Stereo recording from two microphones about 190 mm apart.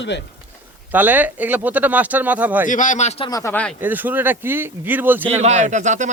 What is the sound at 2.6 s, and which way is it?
Speech, 40° left (ahead or behind).